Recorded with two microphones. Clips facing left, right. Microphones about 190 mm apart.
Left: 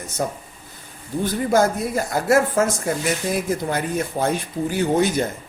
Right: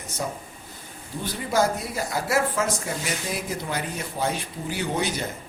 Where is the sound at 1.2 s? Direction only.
50° left (ahead or behind).